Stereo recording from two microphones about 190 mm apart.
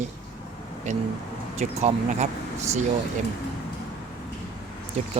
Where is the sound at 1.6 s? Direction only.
35° right (ahead or behind).